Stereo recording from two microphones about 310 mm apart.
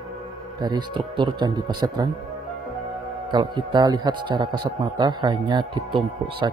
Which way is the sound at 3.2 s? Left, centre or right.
Centre.